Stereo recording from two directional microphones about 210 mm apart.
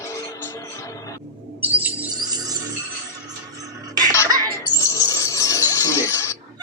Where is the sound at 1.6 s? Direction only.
5° right (ahead or behind).